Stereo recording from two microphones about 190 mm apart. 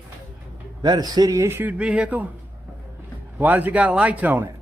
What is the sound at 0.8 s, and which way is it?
A man's voice, 20° right (ahead or behind).